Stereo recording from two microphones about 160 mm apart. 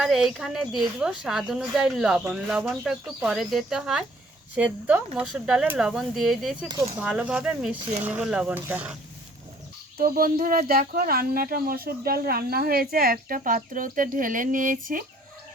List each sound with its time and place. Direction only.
0.0 s a woman's voice: centre (ahead or behind)
6.7 s speech: 20° right (ahead or behind)
7.0 s a woman's voice: 5° right (ahead or behind)
10.0 s speech: 65° right (ahead or behind)